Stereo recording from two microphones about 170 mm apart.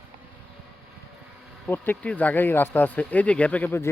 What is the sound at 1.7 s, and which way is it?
Speech, 10° left (ahead or behind).